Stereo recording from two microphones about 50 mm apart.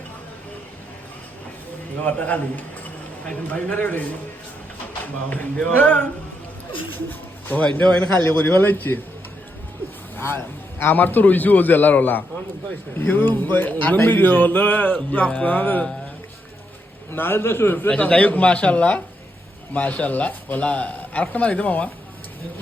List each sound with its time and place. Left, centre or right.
2.0 s a man's voice: left
5.6 s a man's voice: left
7.6 s a man's voice: left
8.4 s a man's voice: left
10.2 s a man's voice: left
17.1 s a man's voice: left
17.8 s a man's voice: left